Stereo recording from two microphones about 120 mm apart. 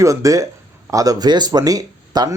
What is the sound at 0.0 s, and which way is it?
Speech, 25° right (ahead or behind).